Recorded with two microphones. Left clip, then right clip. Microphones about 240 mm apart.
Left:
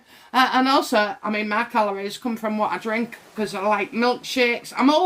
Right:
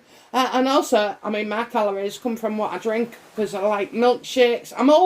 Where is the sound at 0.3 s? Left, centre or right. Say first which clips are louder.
Left 2 dB; centre.